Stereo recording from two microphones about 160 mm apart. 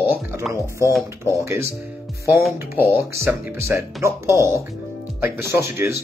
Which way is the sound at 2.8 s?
15° right (ahead or behind).